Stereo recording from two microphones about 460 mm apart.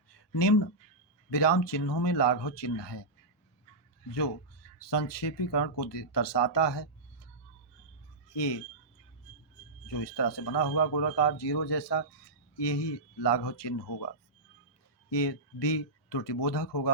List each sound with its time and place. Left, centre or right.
0.1 s a sound: left
1.3 s speech: left
4.8 s speech: left
8.3 s speech: left
9.8 s speech: left
15.1 s speech: left